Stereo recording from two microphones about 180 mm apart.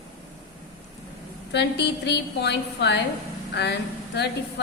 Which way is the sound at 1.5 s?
70° left (ahead or behind).